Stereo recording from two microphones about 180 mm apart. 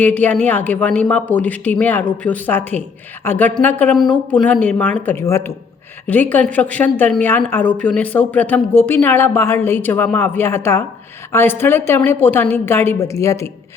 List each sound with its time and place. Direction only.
0.0 s speech: 10° left (ahead or behind)